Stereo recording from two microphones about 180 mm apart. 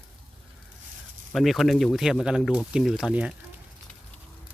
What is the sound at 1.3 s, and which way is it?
Speech, centre (ahead or behind).